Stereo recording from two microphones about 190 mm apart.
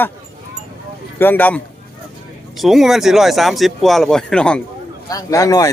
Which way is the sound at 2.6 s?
Centre (ahead or behind).